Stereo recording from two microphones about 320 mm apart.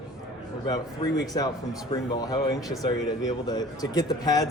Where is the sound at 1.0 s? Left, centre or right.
Centre.